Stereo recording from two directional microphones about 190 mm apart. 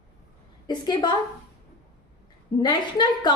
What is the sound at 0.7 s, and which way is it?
Speech, 25° left (ahead or behind).